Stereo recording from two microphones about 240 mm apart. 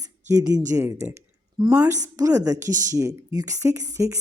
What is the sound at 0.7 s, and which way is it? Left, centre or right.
Speech, centre.